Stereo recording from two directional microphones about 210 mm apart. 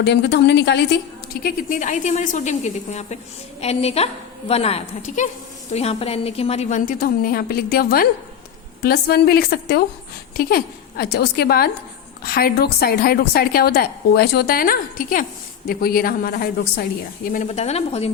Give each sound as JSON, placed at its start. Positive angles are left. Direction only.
{"t": 0.0, "sound": "a woman's voice", "side_deg": 55}
{"t": 1.4, "sound": "a woman's voice", "side_deg": 40}
{"t": 17.3, "sound": "a woman's voice", "side_deg": 35}